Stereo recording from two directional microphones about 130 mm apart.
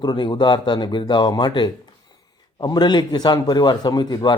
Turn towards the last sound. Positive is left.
turn(degrees=35)  # may be behind; listen again after turning